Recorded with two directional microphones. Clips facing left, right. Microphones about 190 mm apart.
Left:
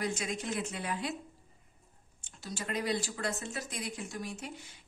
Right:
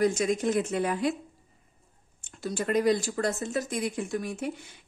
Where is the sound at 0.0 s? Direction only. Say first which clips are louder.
Right 11 dB; 45° right (ahead or behind).